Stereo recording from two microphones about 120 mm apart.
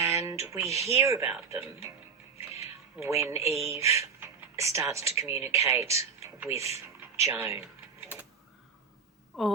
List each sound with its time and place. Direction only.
0.0 s speech: 25° right (ahead or behind)
3.0 s speech: 25° right (ahead or behind)
9.3 s a woman's voice: centre (ahead or behind)